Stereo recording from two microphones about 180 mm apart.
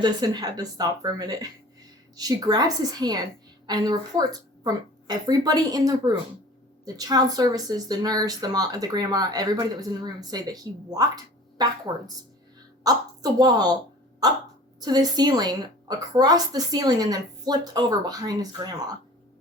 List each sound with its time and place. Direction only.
0.0 s a woman's voice: 20° right (ahead or behind)
14.8 s speech: 20° right (ahead or behind)